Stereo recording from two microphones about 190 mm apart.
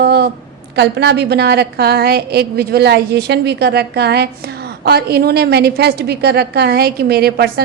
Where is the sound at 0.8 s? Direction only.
60° right (ahead or behind).